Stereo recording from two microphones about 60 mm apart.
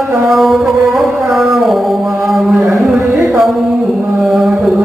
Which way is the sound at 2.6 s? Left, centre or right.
Right.